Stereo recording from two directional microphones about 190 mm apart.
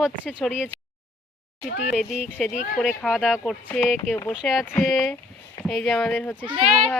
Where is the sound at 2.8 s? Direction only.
Centre (ahead or behind).